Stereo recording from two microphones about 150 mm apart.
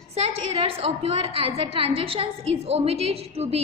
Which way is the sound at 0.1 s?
40° right (ahead or behind).